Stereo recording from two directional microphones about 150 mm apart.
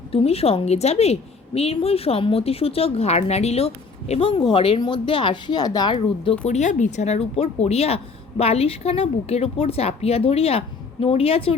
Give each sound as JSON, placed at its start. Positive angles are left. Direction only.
{"t": 0.1, "sound": "a woman's voice", "side_deg": 40}
{"t": 6.5, "sound": "a woman's voice", "side_deg": 55}